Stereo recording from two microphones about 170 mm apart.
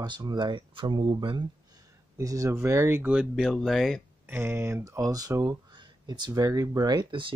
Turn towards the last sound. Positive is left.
turn(degrees=-30)  # may be behind; listen again after turning